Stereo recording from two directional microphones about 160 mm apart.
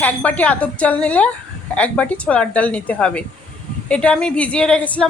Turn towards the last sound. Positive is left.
turn(degrees=10)  # may be behind; listen again after turning